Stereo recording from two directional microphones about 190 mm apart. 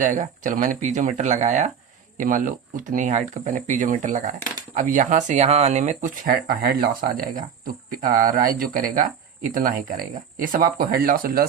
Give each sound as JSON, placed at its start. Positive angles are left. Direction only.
{"t": 0.0, "sound": "speech", "side_deg": -40}